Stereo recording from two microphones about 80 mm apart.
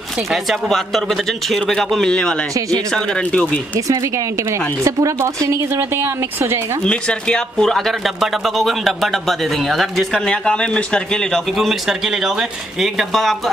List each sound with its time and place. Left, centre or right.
0.3 s speech: centre
4.5 s speech: right
6.8 s speech: centre
11.5 s speech: centre